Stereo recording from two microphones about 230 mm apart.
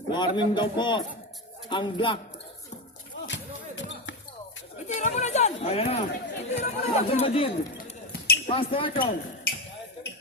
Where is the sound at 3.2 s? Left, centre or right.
Left.